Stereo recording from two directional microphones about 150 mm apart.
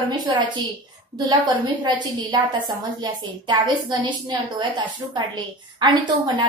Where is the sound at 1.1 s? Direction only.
30° right (ahead or behind).